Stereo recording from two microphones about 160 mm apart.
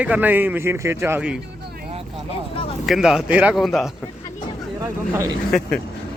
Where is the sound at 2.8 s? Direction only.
Centre (ahead or behind).